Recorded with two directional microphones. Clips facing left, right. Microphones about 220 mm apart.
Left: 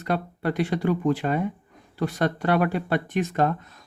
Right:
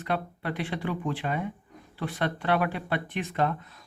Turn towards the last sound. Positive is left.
turn(degrees=45)  # may be behind; listen again after turning